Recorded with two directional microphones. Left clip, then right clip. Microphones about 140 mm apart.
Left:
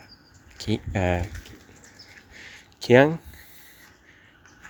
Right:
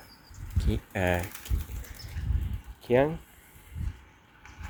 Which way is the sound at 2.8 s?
65° left (ahead or behind).